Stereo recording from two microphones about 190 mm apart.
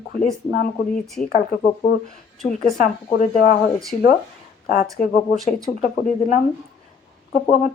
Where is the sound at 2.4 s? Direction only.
45° left (ahead or behind).